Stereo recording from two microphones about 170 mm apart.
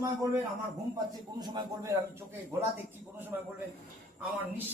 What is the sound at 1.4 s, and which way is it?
A man's voice, 25° right (ahead or behind).